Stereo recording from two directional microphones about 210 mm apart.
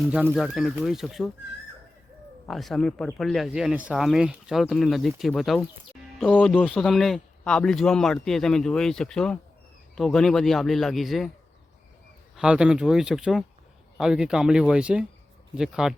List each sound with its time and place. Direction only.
0.0 s a man's voice: 5° right (ahead or behind)
2.5 s a man's voice: centre (ahead or behind)
12.4 s a man's voice: 5° right (ahead or behind)